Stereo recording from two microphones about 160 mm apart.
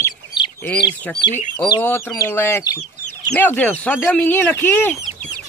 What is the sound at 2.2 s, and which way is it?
Speech, 15° left (ahead or behind).